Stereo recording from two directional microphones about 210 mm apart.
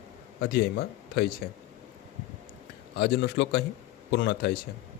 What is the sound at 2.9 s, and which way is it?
Speech, 50° left (ahead or behind).